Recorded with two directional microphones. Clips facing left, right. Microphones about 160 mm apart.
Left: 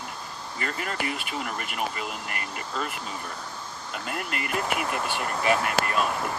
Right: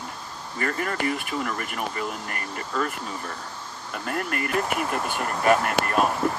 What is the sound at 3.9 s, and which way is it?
Speech, 45° right (ahead or behind).